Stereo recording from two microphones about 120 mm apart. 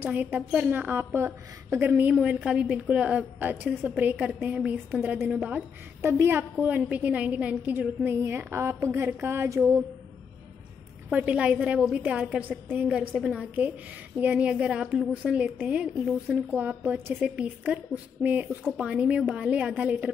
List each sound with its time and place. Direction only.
0.0 s a woman's voice: 15° right (ahead or behind)
11.1 s a woman's voice: 10° right (ahead or behind)